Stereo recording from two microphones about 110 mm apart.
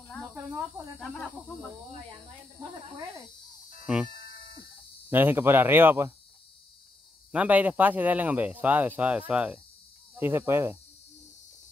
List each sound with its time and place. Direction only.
0.3 s speech: 15° right (ahead or behind)
3.8 s speech: 10° right (ahead or behind)
5.1 s speech: 20° right (ahead or behind)
7.3 s speech: 15° right (ahead or behind)